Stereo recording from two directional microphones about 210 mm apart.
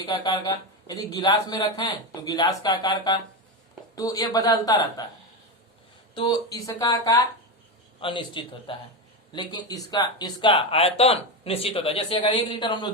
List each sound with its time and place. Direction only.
0.0 s speech: 20° left (ahead or behind)
6.1 s speech: 20° left (ahead or behind)